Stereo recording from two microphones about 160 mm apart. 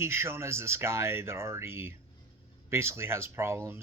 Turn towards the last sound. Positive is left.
turn(degrees=-15)  # may be behind; listen again after turning